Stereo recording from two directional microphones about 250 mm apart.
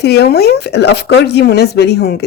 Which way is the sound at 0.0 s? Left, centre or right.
Left.